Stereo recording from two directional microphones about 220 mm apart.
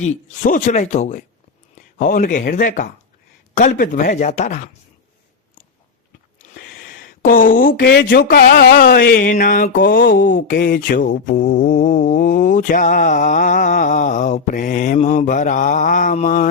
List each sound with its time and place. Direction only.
0.0 s speech: 35° left (ahead or behind)
6.4 s speech: 40° left (ahead or behind)